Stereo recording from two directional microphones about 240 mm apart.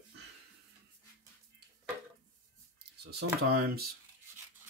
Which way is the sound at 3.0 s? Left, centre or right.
Right.